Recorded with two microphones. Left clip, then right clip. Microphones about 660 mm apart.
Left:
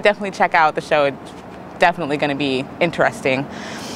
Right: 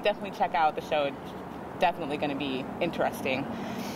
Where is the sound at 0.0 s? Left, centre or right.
Left.